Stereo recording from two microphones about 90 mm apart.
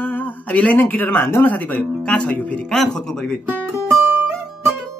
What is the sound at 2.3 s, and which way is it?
Speech, 15° left (ahead or behind).